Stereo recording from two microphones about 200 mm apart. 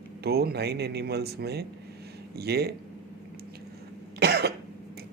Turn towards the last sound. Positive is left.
turn(degrees=-55)  # may be behind; listen again after turning